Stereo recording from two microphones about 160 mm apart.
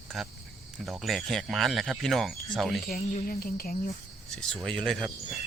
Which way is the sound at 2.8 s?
70° left (ahead or behind).